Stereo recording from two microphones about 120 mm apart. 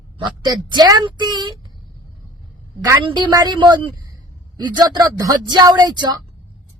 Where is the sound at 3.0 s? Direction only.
40° right (ahead or behind).